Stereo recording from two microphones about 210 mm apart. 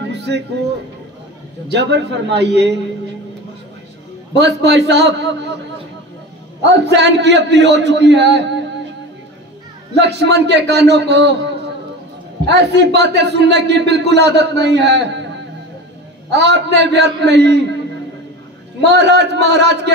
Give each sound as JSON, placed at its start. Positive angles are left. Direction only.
{"t": 0.0, "sound": "a sound", "side_deg": -55}
{"t": 1.7, "sound": "a man's voice", "side_deg": -55}
{"t": 4.4, "sound": "a man's voice", "side_deg": -55}
{"t": 6.7, "sound": "a man's voice", "side_deg": -55}
{"t": 9.9, "sound": "a man's voice", "side_deg": -55}
{"t": 12.4, "sound": "a man's voice", "side_deg": -55}
{"t": 16.3, "sound": "a man's voice", "side_deg": -55}
{"t": 18.9, "sound": "a man's voice", "side_deg": -55}